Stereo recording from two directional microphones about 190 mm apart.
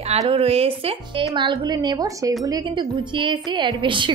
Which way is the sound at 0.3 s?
30° right (ahead or behind).